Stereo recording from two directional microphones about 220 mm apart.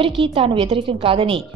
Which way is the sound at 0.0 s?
25° right (ahead or behind).